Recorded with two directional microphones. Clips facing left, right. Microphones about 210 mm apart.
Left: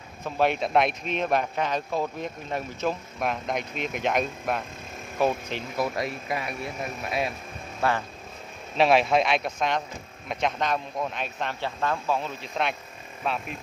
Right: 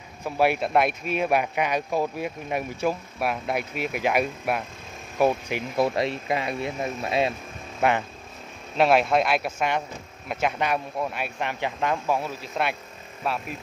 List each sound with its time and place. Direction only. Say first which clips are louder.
0.2 s speech: right 2 dB; 10° right (ahead or behind)
5.8 s speech: right 5 dB; 25° right (ahead or behind)
8.7 s speech: right 1 dB; centre (ahead or behind)